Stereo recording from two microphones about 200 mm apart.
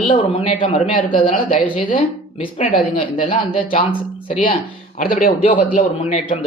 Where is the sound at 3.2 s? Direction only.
25° left (ahead or behind).